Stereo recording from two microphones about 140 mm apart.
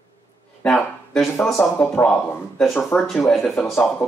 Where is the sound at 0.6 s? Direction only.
5° left (ahead or behind).